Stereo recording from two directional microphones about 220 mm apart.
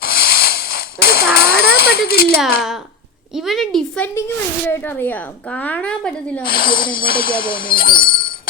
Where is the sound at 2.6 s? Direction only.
Centre (ahead or behind).